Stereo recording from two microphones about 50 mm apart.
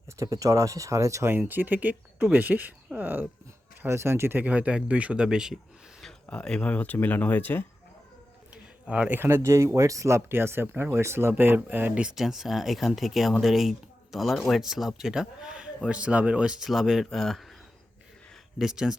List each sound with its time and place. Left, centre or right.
0.2 s speech: right
1.3 s speech: right
3.8 s speech: right
4.4 s speech: right; by 5.5 s centre
6.3 s speech: centre
6.7 s speech: left
8.9 s speech: right
9.2 s speech: right
9.7 s speech: right
12.1 s a man's voice: centre
16.6 s speech: centre
18.6 s a man's voice: centre